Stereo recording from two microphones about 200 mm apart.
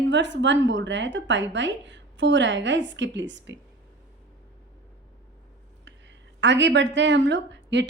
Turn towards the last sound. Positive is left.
turn(degrees=-65)  # may be behind; listen again after turning